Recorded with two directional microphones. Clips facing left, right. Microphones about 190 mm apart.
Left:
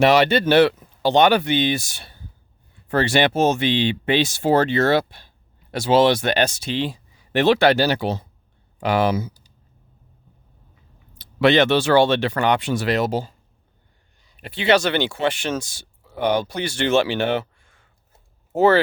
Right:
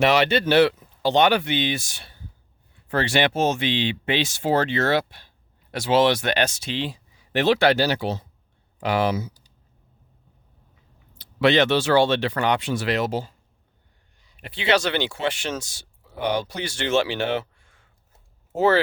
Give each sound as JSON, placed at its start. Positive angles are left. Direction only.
{"t": 0.0, "sound": "speech", "side_deg": 40}
{"t": 11.2, "sound": "speech", "side_deg": 55}
{"t": 18.5, "sound": "speech", "side_deg": 55}